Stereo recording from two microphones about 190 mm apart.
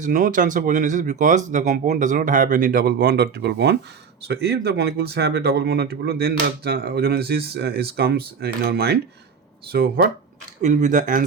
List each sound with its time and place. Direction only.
0.0 s speech: 40° right (ahead or behind)
10.6 s speech: 40° right (ahead or behind)